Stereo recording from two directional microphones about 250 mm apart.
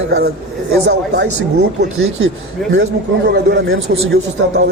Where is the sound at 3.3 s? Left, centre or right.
Right.